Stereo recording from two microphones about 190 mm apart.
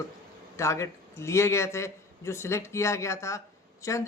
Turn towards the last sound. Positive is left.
turn(degrees=15)  # may be behind; listen again after turning